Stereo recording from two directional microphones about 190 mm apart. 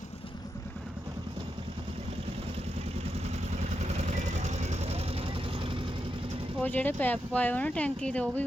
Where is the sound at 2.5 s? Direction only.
35° right (ahead or behind).